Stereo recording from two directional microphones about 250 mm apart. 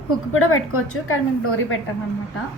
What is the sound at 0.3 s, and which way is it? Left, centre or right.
A woman's voice, left.